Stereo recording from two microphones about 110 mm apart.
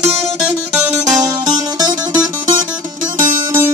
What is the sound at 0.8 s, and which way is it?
Music, 35° right (ahead or behind).